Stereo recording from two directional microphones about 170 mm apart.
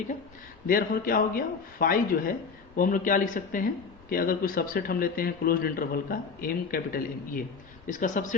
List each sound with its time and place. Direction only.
0.7 s a man's voice: 55° left (ahead or behind)
7.9 s speech: 50° left (ahead or behind)